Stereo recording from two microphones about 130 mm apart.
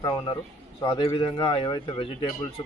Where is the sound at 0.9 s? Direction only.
50° left (ahead or behind).